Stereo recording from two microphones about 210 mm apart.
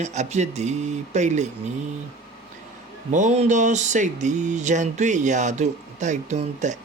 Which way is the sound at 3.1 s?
35° right (ahead or behind).